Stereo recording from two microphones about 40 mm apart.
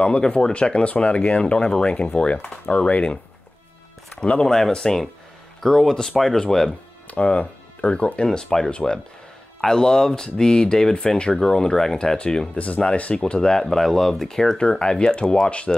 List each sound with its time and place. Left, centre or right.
0.0 s speech: left
4.2 s speech: left
4.6 s speech: centre
7.1 s speech: left
8.3 s speech: centre
9.6 s speech: centre
12.2 s speech: left
12.5 s speech: left
13.2 s speech: left
13.7 s speech: centre
14.8 s speech: left